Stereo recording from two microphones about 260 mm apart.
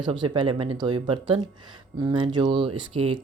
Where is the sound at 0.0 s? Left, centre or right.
Centre.